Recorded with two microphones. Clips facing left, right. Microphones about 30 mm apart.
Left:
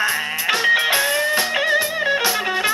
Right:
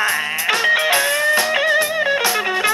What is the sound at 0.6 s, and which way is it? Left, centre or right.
Music, centre.